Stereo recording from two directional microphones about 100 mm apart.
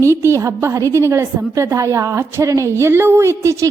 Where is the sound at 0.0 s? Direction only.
25° right (ahead or behind).